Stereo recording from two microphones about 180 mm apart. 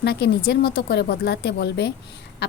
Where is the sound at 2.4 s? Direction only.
65° left (ahead or behind).